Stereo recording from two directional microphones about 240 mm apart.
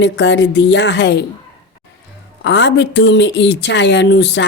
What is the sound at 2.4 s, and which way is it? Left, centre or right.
A woman's voice, left.